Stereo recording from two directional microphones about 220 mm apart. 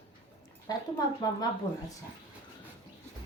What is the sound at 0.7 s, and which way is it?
Speech, 15° left (ahead or behind).